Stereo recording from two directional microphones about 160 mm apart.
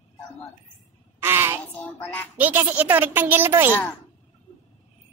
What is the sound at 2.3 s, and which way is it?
A woman's voice, 10° right (ahead or behind).